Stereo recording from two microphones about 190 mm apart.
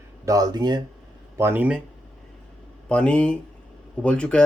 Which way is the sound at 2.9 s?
5° left (ahead or behind).